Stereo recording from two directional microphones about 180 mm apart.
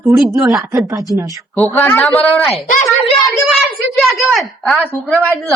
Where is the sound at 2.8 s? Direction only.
Centre (ahead or behind).